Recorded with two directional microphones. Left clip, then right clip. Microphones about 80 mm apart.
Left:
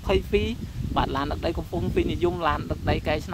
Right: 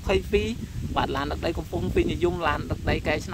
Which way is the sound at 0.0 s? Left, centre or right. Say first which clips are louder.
Even; centre.